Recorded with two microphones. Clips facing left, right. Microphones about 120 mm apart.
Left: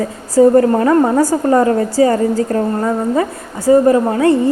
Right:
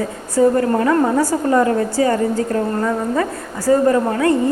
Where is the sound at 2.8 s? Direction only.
25° left (ahead or behind).